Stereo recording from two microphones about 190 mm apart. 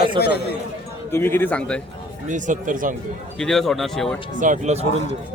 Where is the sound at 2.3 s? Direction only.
40° right (ahead or behind).